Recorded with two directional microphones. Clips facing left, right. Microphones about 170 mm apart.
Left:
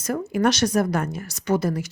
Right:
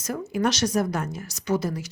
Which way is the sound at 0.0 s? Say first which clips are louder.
Left 4 dB; 55° left (ahead or behind).